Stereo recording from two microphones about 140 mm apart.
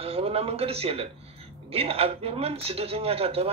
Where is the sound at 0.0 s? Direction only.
45° right (ahead or behind).